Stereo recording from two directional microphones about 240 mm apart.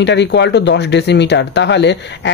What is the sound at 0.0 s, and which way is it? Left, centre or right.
Speech, left.